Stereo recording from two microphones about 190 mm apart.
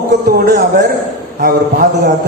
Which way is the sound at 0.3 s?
55° right (ahead or behind).